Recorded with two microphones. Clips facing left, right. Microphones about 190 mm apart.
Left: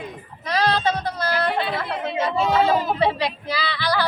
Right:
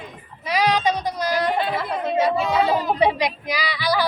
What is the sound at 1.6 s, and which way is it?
Chatter, 45° right (ahead or behind).